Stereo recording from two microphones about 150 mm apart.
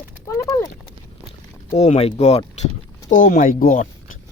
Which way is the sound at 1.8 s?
45° left (ahead or behind).